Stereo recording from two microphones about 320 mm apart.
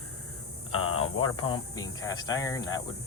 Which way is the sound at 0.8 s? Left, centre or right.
Left.